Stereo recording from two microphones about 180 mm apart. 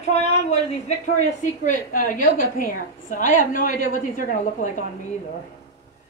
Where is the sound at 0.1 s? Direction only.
40° left (ahead or behind).